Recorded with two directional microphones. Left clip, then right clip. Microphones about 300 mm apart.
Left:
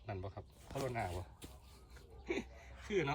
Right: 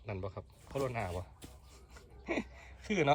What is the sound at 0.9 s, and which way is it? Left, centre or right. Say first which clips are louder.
Speech: right 3 dB; centre.